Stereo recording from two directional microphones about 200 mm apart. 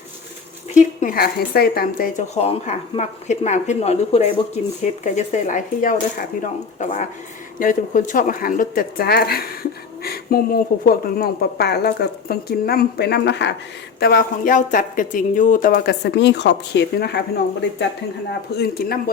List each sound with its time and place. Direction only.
0.7 s speech: 40° left (ahead or behind); by 13.5 s 60° left (ahead or behind)
14.0 s speech: 45° left (ahead or behind)
18.5 s speech: 50° left (ahead or behind)